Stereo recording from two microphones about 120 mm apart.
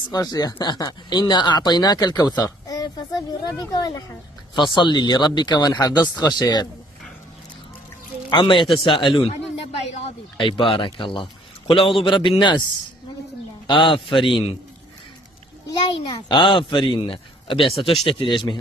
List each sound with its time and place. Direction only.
0.1 s speech: 35° left (ahead or behind)
8.3 s speech: 40° left (ahead or behind)
10.3 s a man's voice: 45° left (ahead or behind)
13.7 s speech: 45° left (ahead or behind)
16.1 s speech: 40° left (ahead or behind)